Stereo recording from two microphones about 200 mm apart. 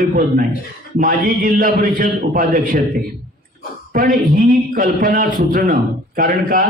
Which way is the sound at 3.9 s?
45° right (ahead or behind).